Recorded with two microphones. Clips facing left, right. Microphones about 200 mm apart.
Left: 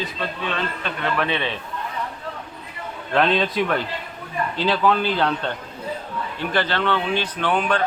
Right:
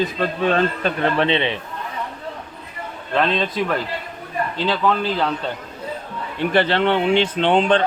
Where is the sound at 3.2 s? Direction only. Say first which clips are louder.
Left 1 dB; centre (ahead or behind).